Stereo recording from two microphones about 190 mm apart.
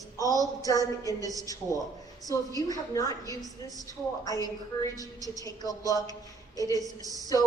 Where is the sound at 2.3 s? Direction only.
20° left (ahead or behind).